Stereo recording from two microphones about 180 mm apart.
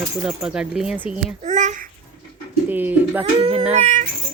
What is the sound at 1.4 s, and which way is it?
Babbling, 40° right (ahead or behind).